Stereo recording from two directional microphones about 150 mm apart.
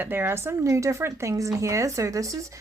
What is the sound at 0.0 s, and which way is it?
Speech, 15° right (ahead or behind).